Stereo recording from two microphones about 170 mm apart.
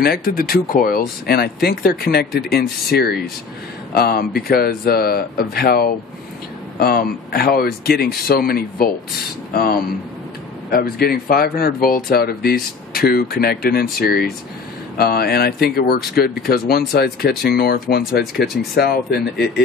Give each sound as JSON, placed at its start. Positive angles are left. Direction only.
{"t": 0.0, "sound": "speech", "side_deg": 65}